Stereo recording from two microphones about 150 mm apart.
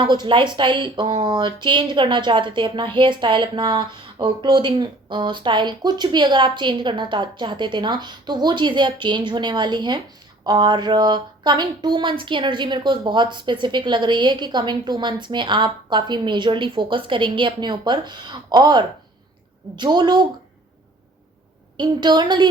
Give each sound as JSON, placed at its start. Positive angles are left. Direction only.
{"t": 0.0, "sound": "a woman's voice", "side_deg": -30}
{"t": 21.8, "sound": "a woman's voice", "side_deg": -30}